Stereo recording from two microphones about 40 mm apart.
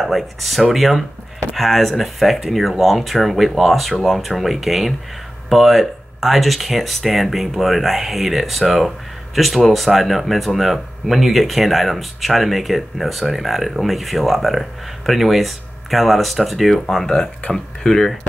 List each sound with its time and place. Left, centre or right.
0.0 s speech: centre
16.7 s speech: centre